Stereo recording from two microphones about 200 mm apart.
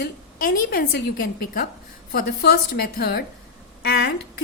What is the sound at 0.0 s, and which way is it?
A woman's voice, 50° left (ahead or behind).